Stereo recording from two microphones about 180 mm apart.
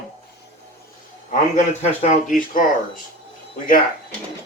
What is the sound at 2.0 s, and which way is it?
Speech, 45° left (ahead or behind).